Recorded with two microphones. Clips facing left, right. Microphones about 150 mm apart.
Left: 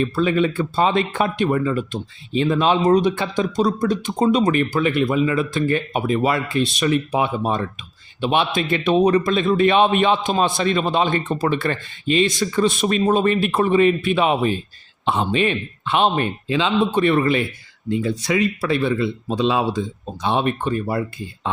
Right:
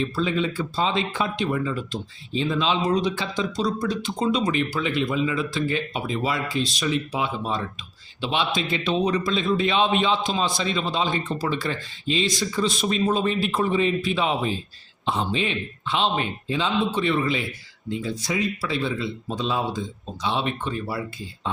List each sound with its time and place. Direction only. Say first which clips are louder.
0.0 s a man's voice: left 6 dB; 60° left (ahead or behind)
16.5 s a man's voice: left 4 dB; 80° left
20.2 s speech: left 5 dB; 50° left (ahead or behind)